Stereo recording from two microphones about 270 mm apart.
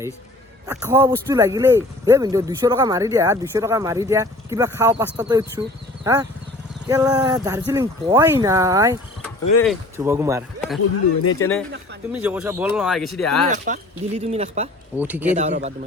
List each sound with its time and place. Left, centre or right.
0.7 s speech: centre
6.8 s speech: centre
10.0 s speech: centre
10.8 s speech: left
11.3 s speech: centre
12.1 s speech: centre
13.5 s speech: right
14.9 s speech: centre
15.3 s speech: right